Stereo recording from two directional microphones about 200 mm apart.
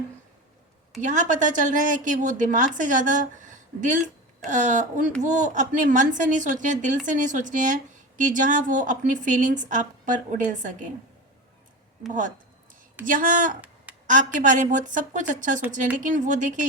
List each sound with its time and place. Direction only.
1.0 s a woman's voice: 40° right (ahead or behind)
12.0 s a woman's voice: 40° right (ahead or behind)
13.9 s a sound: 10° right (ahead or behind)
14.3 s a woman's voice: 40° right (ahead or behind)